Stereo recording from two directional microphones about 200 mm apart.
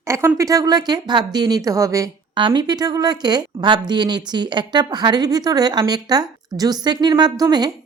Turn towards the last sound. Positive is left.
turn(degrees=-20)  # may be behind; listen again after turning